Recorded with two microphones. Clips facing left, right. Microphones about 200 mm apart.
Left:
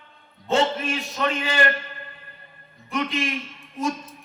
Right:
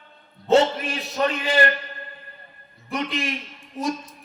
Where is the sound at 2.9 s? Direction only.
35° right (ahead or behind).